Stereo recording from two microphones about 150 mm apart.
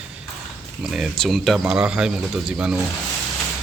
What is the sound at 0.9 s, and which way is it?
Speech, centre (ahead or behind).